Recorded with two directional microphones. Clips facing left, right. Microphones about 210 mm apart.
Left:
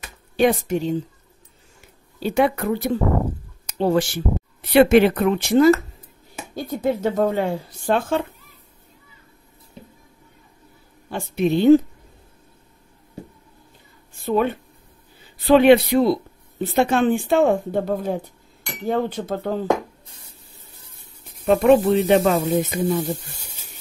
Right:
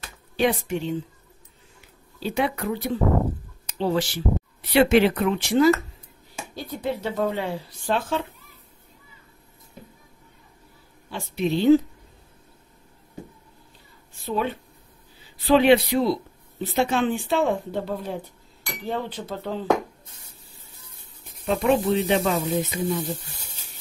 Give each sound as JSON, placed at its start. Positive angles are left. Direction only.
{"t": 0.4, "sound": "speech", "side_deg": 40}
{"t": 1.8, "sound": "a sound", "side_deg": 50}
{"t": 3.7, "sound": "speech", "side_deg": 50}
{"t": 11.1, "sound": "speech", "side_deg": 50}
{"t": 14.2, "sound": "speech", "side_deg": 50}
{"t": 21.5, "sound": "speech", "side_deg": 60}